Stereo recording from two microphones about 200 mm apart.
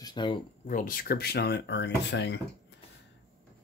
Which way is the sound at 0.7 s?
40° left (ahead or behind).